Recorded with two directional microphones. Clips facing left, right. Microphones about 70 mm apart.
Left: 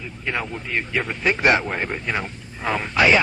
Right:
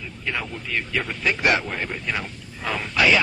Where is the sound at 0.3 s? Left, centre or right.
Left.